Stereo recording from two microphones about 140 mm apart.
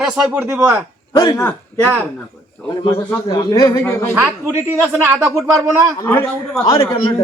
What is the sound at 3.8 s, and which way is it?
Speech, 15° left (ahead or behind).